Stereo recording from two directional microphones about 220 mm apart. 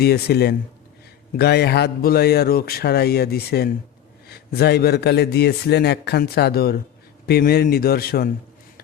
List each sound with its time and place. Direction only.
0.0 s a man's voice: 45° left (ahead or behind)